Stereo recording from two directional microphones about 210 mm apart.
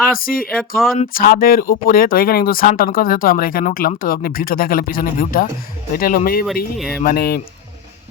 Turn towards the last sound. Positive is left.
turn(degrees=45)  # may be behind; listen again after turning